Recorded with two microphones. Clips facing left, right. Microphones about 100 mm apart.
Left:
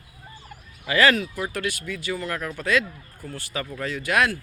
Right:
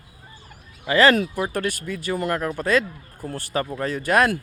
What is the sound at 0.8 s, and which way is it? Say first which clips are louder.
Speech: right 3 dB; 25° right (ahead or behind).